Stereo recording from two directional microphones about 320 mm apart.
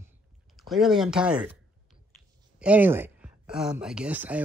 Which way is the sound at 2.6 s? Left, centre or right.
Centre.